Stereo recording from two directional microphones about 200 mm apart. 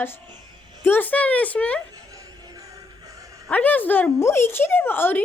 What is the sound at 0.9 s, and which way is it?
Speech, 10° left (ahead or behind).